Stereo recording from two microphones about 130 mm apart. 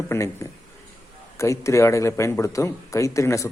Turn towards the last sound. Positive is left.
turn(degrees=25)  # may be behind; listen again after turning